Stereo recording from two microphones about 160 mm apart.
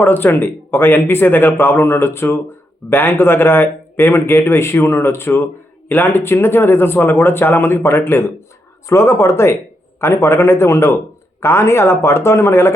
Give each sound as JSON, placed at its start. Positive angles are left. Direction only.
{"t": 0.0, "sound": "a man's voice", "side_deg": 10}